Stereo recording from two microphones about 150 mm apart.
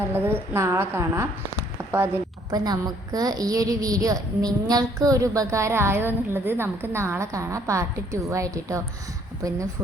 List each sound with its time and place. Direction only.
0.1 s a woman's voice: 15° right (ahead or behind)
1.8 s a sound: 20° right (ahead or behind)
2.5 s a woman's voice: 25° right (ahead or behind)